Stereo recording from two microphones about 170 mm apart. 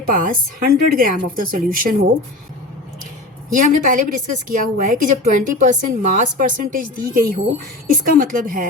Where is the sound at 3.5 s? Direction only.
50° right (ahead or behind).